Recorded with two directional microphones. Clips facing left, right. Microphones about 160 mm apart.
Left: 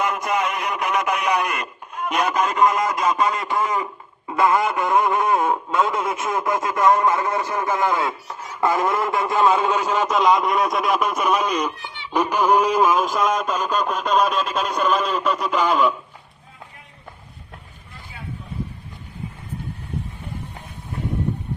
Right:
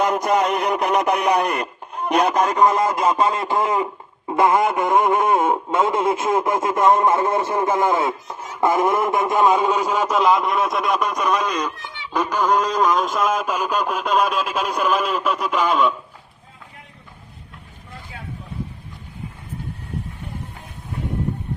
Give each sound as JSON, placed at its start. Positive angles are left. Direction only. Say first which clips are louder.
{"t": 0.0, "sound": "speech", "louder": "right 4 dB", "side_deg": -35}
{"t": 4.3, "sound": "radio", "louder": "right 2 dB", "side_deg": -20}